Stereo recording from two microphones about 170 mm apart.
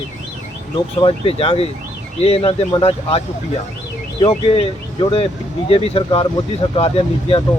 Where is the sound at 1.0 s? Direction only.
35° left (ahead or behind).